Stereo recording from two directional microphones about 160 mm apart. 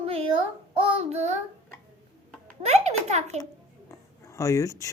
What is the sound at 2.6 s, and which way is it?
Speech, 45° right (ahead or behind).